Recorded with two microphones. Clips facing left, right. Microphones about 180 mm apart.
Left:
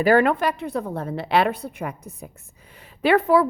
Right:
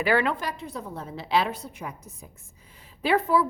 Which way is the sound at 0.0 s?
45° left (ahead or behind).